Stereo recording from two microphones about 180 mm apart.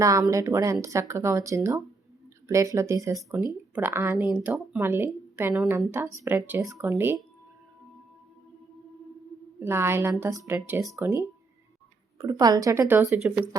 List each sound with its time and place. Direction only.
0.0 s a woman's voice: 15° right (ahead or behind)
9.6 s a woman's voice: 15° right (ahead or behind)
12.2 s a woman's voice: 20° right (ahead or behind)